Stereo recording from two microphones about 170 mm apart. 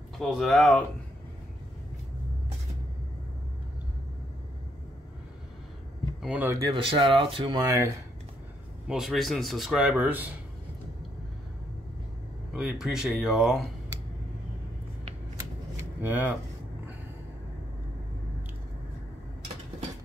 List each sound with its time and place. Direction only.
0.2 s speech: centre (ahead or behind)
6.2 s speech: 10° right (ahead or behind)
6.7 s speech: 30° right (ahead or behind)
7.6 s speech: 20° right (ahead or behind)
8.8 s speech: centre (ahead or behind)
12.5 s speech: 5° right (ahead or behind)
16.0 s speech: 10° right (ahead or behind)